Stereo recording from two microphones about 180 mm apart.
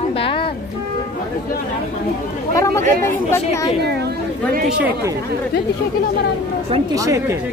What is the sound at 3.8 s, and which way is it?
Speech, 65° right (ahead or behind).